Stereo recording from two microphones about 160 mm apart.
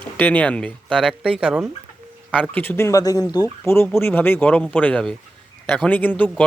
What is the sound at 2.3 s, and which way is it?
Speech, 10° left (ahead or behind).